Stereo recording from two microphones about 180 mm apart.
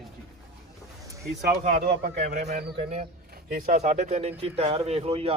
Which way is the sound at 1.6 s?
60° right (ahead or behind).